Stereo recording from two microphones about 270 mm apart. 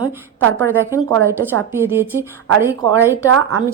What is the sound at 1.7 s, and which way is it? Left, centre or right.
Speech, centre.